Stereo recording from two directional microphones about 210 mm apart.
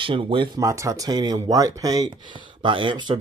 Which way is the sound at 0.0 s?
25° right (ahead or behind).